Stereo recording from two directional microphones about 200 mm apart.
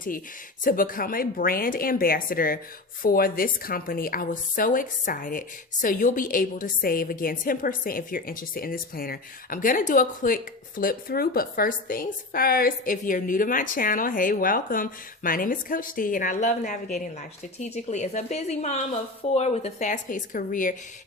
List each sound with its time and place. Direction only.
0.6 s a woman's voice: 45° left (ahead or behind)